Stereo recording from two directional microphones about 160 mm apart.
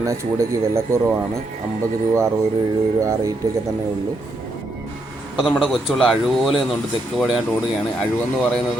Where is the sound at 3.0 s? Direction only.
20° right (ahead or behind).